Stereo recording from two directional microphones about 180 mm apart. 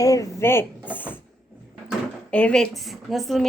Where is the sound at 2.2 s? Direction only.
5° left (ahead or behind).